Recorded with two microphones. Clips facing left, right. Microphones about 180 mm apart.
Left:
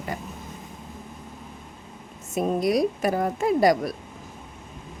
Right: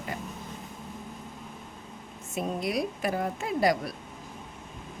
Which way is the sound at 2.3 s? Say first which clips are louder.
Left 7 dB; 40° left (ahead or behind).